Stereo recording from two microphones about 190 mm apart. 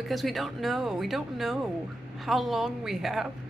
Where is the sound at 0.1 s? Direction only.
Centre (ahead or behind).